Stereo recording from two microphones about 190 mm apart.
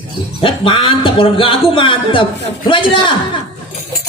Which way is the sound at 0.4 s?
25° left (ahead or behind).